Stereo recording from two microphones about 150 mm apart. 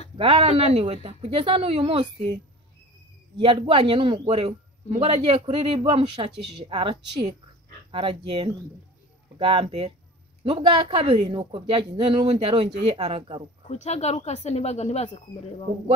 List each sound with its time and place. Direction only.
0.2 s a man's voice: 40° right (ahead or behind)
3.3 s a man's voice: 35° right (ahead or behind)
13.7 s speech: 45° left (ahead or behind)